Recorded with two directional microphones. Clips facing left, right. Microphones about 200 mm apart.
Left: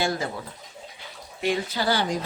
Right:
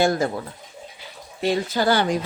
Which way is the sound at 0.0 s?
50° right (ahead or behind).